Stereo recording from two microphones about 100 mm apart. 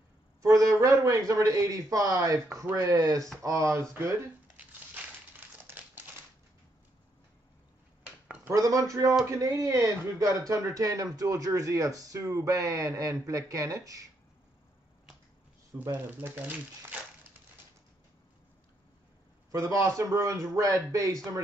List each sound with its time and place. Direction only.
0.4 s speech: 30° right (ahead or behind)
5.7 s crumpling: 20° right (ahead or behind)
8.5 s speech: 35° right (ahead or behind)
15.8 s speech: 20° right (ahead or behind)
19.5 s speech: 35° right (ahead or behind)